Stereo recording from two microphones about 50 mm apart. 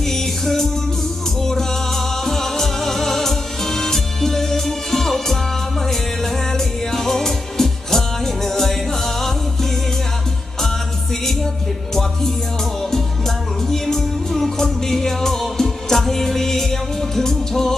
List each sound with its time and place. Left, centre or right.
0.0 s music: centre
12.8 s music: centre